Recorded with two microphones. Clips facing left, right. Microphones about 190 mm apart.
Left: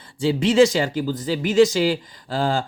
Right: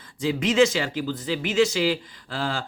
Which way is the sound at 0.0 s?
30° left (ahead or behind).